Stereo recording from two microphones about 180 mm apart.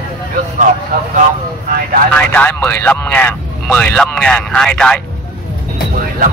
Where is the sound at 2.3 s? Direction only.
10° left (ahead or behind).